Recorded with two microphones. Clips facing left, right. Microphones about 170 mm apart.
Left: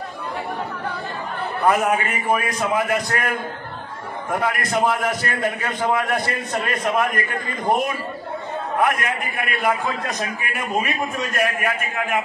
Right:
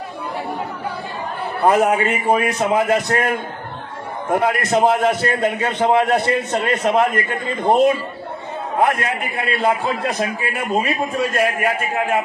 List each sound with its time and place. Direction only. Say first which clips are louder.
1.6 s a man's voice: right 4 dB; 30° right (ahead or behind)